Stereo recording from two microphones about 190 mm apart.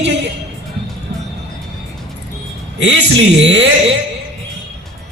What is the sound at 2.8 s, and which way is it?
Speech, 70° right (ahead or behind).